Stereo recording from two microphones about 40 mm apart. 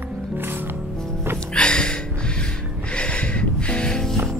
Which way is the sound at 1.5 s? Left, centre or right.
Left.